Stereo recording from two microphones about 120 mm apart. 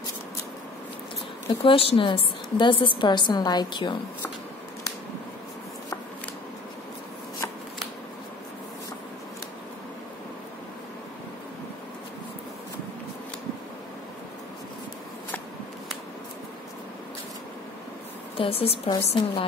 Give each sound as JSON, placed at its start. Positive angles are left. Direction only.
{"t": 1.5, "sound": "a woman's voice", "side_deg": 50}
{"t": 18.4, "sound": "a woman's voice", "side_deg": 55}